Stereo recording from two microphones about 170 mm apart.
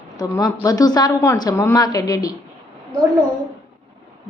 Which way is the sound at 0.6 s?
20° left (ahead or behind).